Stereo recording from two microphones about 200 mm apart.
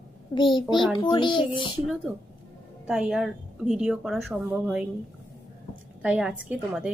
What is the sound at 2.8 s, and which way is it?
A woman's voice, 5° right (ahead or behind).